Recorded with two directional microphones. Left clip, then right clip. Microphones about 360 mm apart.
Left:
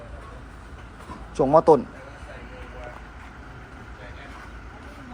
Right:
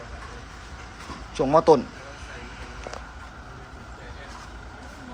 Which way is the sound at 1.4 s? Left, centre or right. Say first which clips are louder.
Left 1 dB; centre.